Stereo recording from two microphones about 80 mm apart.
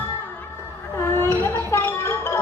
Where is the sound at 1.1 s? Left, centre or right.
Left.